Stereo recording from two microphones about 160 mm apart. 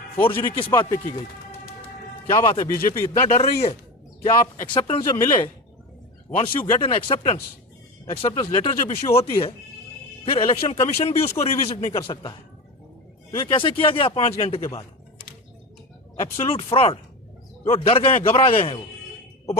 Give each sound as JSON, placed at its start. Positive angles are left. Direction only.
{"t": 0.4, "sound": "speech", "side_deg": 30}
{"t": 2.3, "sound": "speech", "side_deg": 30}
{"t": 2.8, "sound": "speech", "side_deg": 40}
{"t": 5.1, "sound": "speech", "side_deg": 20}
{"t": 6.3, "sound": "speech", "side_deg": 35}
{"t": 13.4, "sound": "speech", "side_deg": 30}
{"t": 16.2, "sound": "speech", "side_deg": 40}